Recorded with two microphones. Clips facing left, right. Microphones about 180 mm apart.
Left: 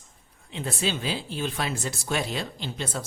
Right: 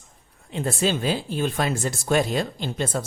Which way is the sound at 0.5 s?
45° right (ahead or behind).